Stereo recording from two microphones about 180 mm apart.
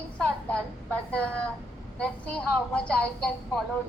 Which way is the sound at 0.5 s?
5° left (ahead or behind).